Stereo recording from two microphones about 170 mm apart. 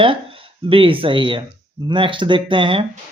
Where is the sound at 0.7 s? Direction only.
30° right (ahead or behind).